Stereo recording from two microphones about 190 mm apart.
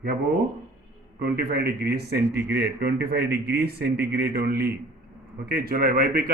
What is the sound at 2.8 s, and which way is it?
A man's voice, 55° right (ahead or behind).